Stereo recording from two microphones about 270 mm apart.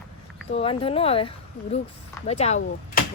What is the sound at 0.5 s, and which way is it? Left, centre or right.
Speech, left.